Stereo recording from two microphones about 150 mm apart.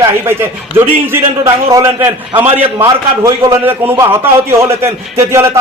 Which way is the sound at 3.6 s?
15° right (ahead or behind).